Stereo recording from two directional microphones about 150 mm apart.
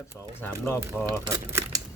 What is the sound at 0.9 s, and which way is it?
Crumpling, 15° right (ahead or behind).